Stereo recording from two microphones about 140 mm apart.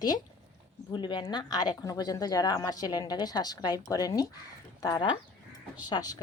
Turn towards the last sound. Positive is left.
turn(degrees=30)  # may be behind; listen again after turning